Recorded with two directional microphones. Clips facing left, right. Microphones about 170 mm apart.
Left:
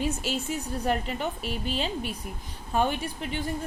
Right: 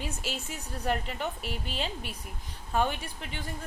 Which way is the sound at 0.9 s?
20° left (ahead or behind).